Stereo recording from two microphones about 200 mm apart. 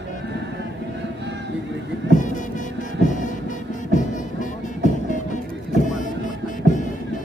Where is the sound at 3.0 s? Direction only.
40° left (ahead or behind).